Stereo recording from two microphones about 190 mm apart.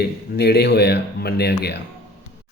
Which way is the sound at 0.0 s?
60° left (ahead or behind).